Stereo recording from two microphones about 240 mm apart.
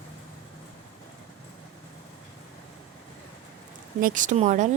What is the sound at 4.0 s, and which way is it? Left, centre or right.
Speech, right.